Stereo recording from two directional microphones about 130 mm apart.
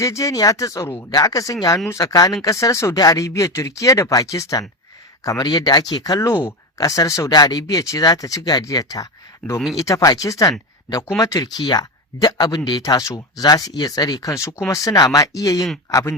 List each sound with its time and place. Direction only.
0.0 s speech: 25° left (ahead or behind)
9.4 s speech: 5° right (ahead or behind)
9.7 s speech: 25° left (ahead or behind)